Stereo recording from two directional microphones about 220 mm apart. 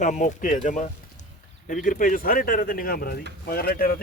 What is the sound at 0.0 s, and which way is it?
Speech, 35° left (ahead or behind).